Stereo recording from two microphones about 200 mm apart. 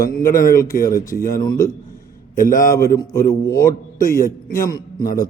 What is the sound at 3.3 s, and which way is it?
Speech, 15° left (ahead or behind).